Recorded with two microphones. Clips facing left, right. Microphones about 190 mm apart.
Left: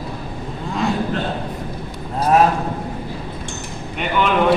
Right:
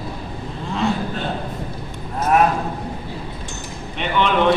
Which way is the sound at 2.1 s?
35° left (ahead or behind).